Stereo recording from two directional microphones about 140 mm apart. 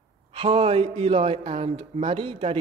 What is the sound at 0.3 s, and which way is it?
Speech, 40° right (ahead or behind).